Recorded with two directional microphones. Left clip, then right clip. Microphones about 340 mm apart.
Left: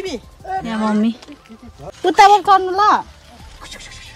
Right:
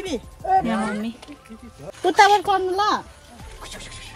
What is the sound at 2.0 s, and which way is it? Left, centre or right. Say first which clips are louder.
Speech: left 5 dB; centre.